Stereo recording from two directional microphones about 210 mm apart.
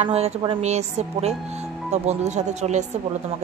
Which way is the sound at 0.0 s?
30° right (ahead or behind).